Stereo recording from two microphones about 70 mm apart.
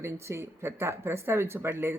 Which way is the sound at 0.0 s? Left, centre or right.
Right.